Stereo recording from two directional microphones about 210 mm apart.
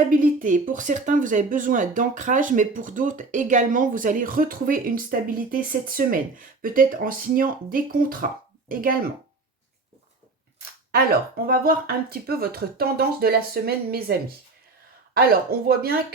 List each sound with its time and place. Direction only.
0.1 s speech: 40° right (ahead or behind)
10.9 s speech: 45° right (ahead or behind)